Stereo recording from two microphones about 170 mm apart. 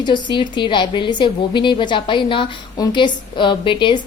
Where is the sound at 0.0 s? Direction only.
25° left (ahead or behind).